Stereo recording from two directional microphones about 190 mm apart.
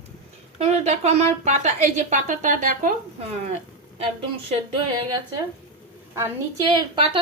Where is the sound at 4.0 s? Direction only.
30° right (ahead or behind).